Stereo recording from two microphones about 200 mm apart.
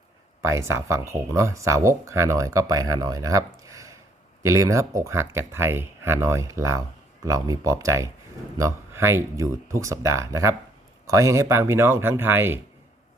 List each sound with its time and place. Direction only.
0.4 s speech: 15° right (ahead or behind)